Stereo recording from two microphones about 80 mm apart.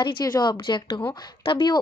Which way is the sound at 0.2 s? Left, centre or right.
Left.